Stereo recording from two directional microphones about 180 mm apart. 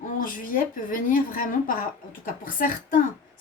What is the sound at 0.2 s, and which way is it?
A woman's voice, 50° left (ahead or behind).